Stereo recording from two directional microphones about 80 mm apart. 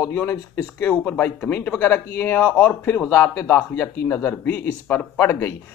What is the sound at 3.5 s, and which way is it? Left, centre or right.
Speech, left.